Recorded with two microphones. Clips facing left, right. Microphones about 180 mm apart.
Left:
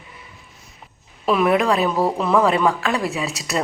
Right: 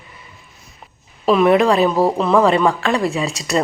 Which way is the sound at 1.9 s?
25° right (ahead or behind).